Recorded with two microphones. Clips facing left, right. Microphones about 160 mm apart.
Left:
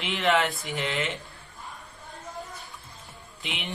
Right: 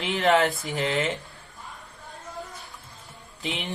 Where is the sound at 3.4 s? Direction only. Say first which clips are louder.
Right 5 dB; 40° right (ahead or behind).